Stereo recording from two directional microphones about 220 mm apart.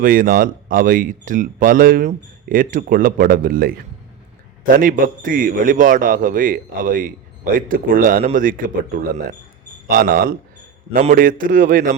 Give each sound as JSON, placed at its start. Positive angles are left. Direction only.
{"t": 0.0, "sound": "speech", "side_deg": -40}